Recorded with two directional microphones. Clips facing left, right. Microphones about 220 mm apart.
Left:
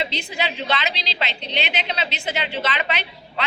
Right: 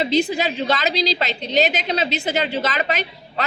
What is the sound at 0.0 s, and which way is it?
A woman's voice, 40° right (ahead or behind).